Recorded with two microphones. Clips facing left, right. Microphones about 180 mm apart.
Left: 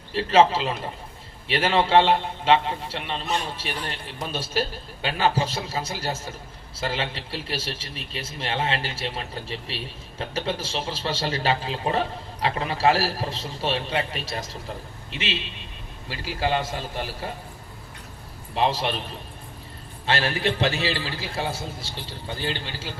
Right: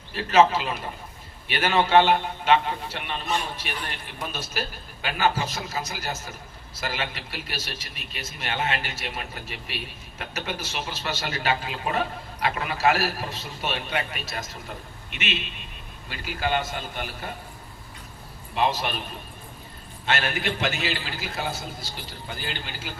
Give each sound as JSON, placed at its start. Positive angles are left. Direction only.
{"t": 0.1, "sound": "a man's voice", "side_deg": 30}
{"t": 18.5, "sound": "a man's voice", "side_deg": 30}
{"t": 20.1, "sound": "a man's voice", "side_deg": 30}